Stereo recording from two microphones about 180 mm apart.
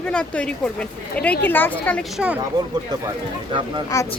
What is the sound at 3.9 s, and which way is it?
Speech, 20° left (ahead or behind).